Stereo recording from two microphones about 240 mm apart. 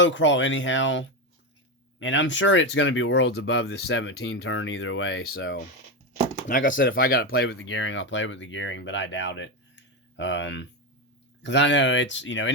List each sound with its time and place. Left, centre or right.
0.0 s speech: left
6.5 s speech: left